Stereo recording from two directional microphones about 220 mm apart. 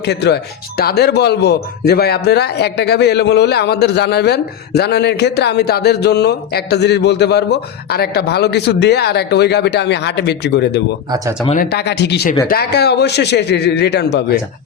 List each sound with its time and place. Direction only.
0.0 s speech: 50° left (ahead or behind)